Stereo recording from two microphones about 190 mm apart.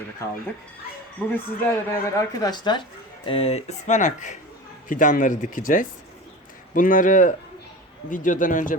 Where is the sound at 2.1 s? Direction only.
20° left (ahead or behind).